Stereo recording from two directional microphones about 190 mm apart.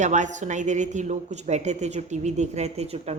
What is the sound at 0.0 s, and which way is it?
A woman's voice, 40° right (ahead or behind).